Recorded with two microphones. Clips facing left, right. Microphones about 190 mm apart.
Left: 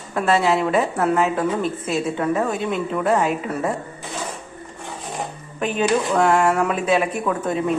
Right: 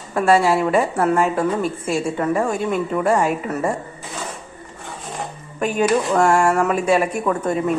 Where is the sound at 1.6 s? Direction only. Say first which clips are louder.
Right 1 dB; 50° right (ahead or behind).